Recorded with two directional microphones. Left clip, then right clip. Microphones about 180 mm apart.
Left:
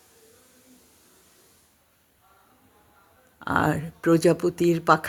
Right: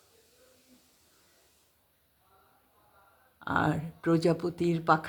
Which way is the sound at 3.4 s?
15° left (ahead or behind).